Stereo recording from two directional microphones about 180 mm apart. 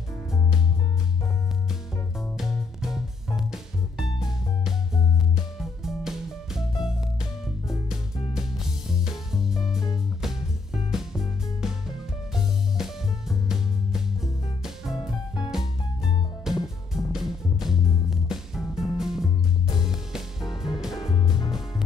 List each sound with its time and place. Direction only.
1.7 s music: centre (ahead or behind)
10.9 s music: centre (ahead or behind)
21.1 s music: 25° left (ahead or behind)
21.5 s music: centre (ahead or behind)